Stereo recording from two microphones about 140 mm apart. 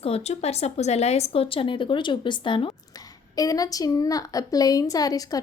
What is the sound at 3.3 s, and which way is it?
A woman's voice, 25° left (ahead or behind).